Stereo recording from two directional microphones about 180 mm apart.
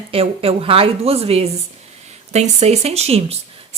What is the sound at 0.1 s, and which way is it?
A woman's voice, 30° right (ahead or behind).